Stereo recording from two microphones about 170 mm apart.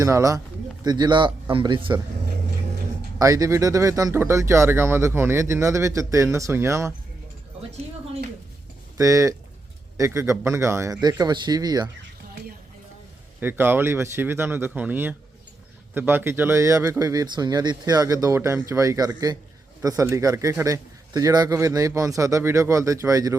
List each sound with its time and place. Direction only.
0.0 s a man's voice: 20° right (ahead or behind)
3.2 s speech: 20° right (ahead or behind)
9.0 s a man's voice: 20° right (ahead or behind)
13.4 s a man's voice: 10° right (ahead or behind)